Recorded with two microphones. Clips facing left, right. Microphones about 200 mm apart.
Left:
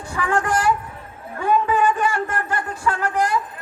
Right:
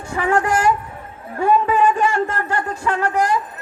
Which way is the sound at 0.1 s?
25° right (ahead or behind).